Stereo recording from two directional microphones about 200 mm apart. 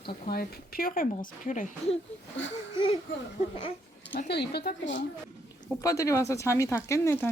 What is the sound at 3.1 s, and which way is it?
Speech, 65° left (ahead or behind).